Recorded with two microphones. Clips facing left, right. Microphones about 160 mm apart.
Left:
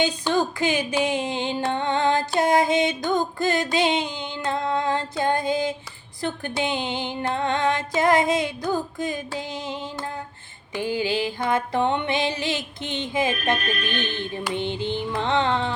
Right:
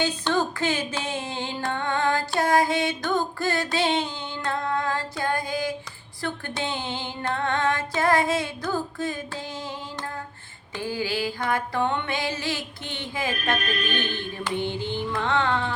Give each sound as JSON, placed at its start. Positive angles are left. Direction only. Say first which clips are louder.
{"t": 0.0, "sound": "music", "louder": "left 2 dB", "side_deg": 15}